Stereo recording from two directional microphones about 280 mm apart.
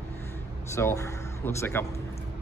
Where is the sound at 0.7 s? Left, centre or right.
Centre.